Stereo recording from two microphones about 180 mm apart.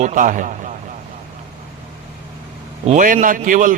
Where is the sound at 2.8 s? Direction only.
45° right (ahead or behind).